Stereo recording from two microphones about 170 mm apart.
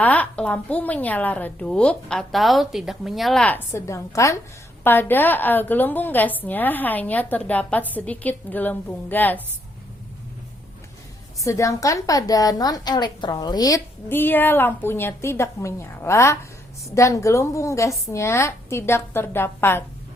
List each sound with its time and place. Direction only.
0.0 s a woman's voice: 10° left (ahead or behind)
11.4 s a woman's voice: 20° left (ahead or behind)